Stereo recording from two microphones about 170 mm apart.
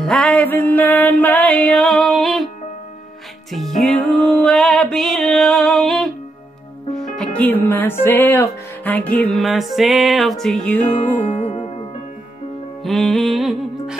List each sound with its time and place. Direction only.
0.0 s music: 5° left (ahead or behind)
3.5 s music: centre (ahead or behind)
7.2 s music: 10° left (ahead or behind)
11.3 s music: 35° left (ahead or behind)
12.8 s music: centre (ahead or behind)